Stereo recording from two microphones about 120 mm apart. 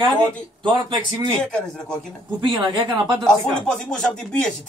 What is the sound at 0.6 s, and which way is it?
Speech, 40° right (ahead or behind).